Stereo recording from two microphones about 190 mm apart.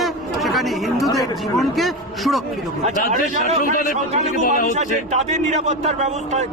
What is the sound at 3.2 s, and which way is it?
Speech, 45° left (ahead or behind).